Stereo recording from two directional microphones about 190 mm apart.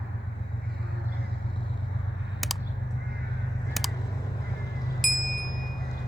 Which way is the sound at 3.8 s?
Centre (ahead or behind).